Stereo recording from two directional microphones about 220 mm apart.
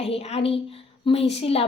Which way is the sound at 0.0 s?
25° left (ahead or behind).